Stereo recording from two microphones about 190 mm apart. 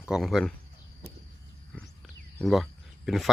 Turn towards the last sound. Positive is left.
turn(degrees=0)  # may be behind; listen again after turning